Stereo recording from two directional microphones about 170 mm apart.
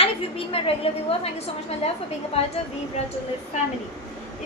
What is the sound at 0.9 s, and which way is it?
Speech, 35° left (ahead or behind).